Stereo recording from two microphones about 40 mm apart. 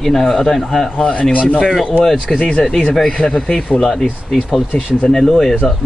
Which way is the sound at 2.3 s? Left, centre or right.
Left.